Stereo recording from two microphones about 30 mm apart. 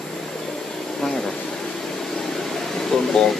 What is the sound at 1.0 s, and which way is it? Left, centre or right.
Speech, centre.